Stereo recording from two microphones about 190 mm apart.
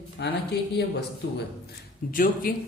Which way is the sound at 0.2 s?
65° left (ahead or behind).